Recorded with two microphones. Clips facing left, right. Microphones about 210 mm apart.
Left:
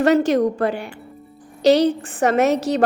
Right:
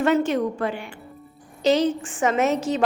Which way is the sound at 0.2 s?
40° left (ahead or behind).